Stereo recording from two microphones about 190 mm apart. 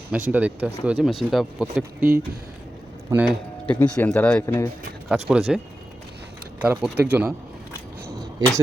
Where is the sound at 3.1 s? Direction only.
Centre (ahead or behind).